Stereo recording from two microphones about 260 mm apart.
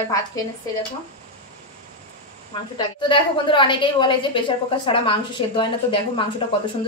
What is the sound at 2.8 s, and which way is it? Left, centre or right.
A woman's voice, centre.